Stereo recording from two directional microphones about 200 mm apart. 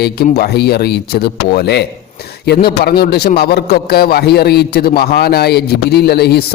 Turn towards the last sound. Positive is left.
turn(degrees=50)  # may be behind; listen again after turning